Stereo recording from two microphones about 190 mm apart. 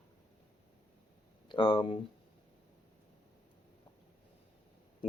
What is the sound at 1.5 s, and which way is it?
Speech, 25° left (ahead or behind).